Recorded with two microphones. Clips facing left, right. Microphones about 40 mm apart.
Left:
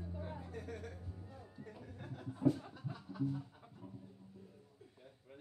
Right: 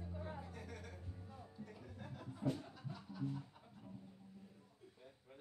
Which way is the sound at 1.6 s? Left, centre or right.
Centre.